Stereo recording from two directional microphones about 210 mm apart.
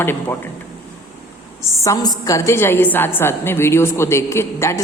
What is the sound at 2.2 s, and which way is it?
A woman's voice, 15° left (ahead or behind).